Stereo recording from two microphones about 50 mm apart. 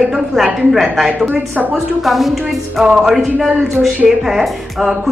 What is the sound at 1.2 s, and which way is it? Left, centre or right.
Speech, right.